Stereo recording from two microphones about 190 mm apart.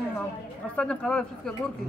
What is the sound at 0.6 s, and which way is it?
Speech, 5° left (ahead or behind).